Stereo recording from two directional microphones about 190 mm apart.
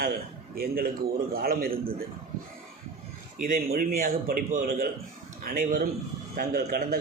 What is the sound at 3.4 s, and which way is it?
A man's voice, 50° right (ahead or behind).